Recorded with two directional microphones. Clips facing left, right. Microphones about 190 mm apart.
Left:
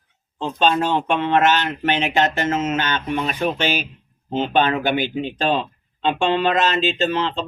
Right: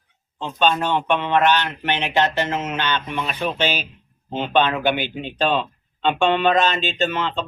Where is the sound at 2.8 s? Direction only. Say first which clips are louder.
Left 2 dB; 45° left (ahead or behind).